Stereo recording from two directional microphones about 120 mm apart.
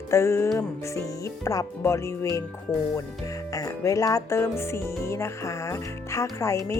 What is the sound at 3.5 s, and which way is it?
Speech, 25° left (ahead or behind).